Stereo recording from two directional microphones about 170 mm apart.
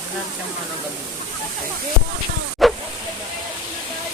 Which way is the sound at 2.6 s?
Centre (ahead or behind).